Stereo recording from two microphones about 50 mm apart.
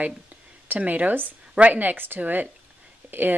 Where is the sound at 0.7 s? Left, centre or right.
Right.